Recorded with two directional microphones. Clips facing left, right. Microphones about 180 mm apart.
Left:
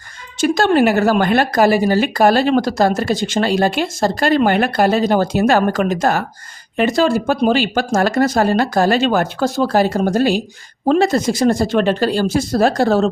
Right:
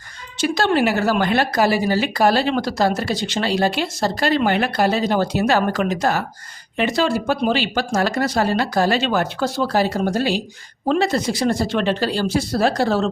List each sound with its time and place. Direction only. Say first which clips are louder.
0.3 s speech: left 5 dB; 50° left (ahead or behind)